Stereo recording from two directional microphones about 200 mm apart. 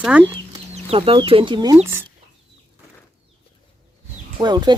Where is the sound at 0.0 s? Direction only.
5° right (ahead or behind).